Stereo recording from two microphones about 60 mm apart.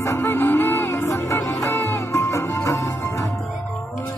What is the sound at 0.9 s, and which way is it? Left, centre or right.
Music, left.